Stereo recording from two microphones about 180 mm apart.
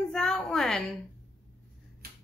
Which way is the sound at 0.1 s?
5° left (ahead or behind).